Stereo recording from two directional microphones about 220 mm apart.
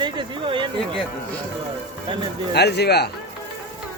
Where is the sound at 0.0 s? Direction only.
20° right (ahead or behind).